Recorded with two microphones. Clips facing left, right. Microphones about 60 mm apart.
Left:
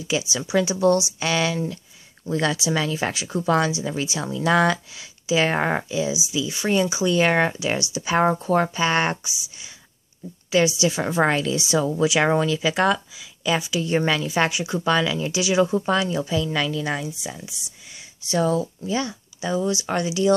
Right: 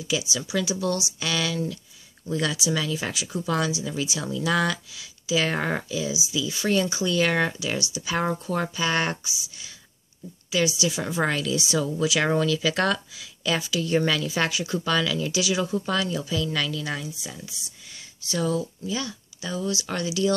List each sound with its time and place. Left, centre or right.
0.1 s a woman's voice: left
7.2 s speech: left
10.5 s a woman's voice: left; by 18.0 s centre
18.3 s a woman's voice: left